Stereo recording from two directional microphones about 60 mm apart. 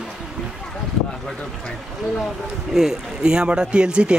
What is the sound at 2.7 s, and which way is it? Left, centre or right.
Speech, centre.